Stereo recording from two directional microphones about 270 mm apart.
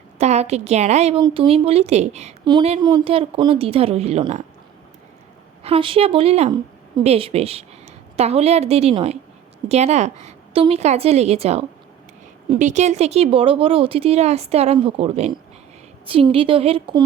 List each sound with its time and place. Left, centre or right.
0.2 s a woman's voice: right
5.6 s a woman's voice: right